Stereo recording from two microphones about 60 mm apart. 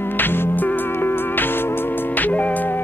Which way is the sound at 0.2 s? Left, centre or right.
Left.